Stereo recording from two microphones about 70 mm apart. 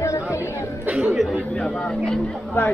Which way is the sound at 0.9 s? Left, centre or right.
Centre.